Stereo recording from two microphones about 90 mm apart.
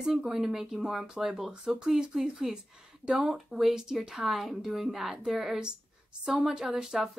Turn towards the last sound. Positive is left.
turn(degrees=-5)  # may be behind; listen again after turning